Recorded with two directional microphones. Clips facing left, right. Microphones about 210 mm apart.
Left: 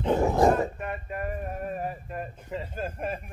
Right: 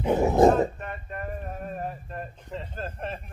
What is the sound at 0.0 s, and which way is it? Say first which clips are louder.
Dog: right 3 dB; 15° right (ahead or behind).